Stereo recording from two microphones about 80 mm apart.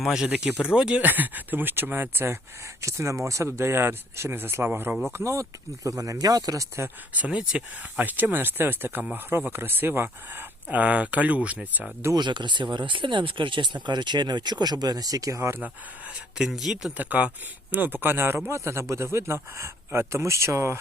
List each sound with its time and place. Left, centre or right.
0.0 s speech: centre
1.0 s speech: right
2.8 s speech: right
5.1 s speech: right
6.8 s speech: centre
12.1 s speech: right
15.4 s speech: right
16.4 s speech: centre
17.0 s speech: centre; by 20.7 s right